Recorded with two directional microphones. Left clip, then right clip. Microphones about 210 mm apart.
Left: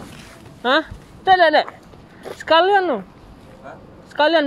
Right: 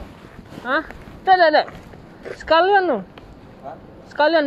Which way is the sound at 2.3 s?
45° left (ahead or behind).